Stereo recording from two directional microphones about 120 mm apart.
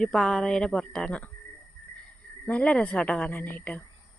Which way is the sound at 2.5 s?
10° left (ahead or behind).